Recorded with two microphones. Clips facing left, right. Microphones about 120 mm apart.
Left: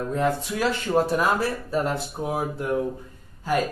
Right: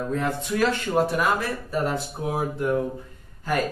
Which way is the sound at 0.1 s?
15° left (ahead or behind).